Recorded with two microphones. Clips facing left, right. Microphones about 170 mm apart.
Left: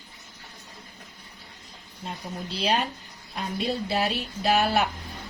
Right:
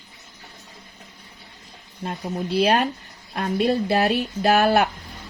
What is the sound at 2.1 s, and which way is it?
Speech, 55° right (ahead or behind).